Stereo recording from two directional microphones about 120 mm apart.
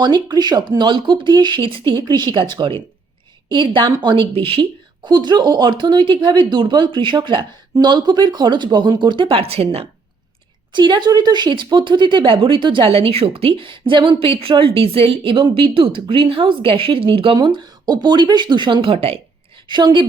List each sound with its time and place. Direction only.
0.0 s speech: 35° right (ahead or behind)
5.0 s speech: 40° right (ahead or behind)
10.7 s speech: 40° right (ahead or behind)
19.6 s speech: 40° right (ahead or behind)